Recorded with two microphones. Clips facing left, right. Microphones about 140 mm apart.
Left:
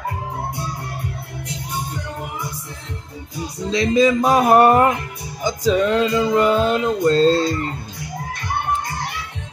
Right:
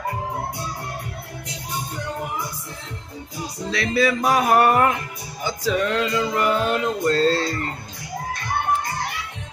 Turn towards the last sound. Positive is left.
turn(degrees=25)  # may be behind; listen again after turning